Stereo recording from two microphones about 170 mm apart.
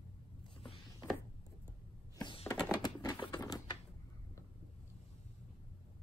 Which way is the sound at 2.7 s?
20° left (ahead or behind).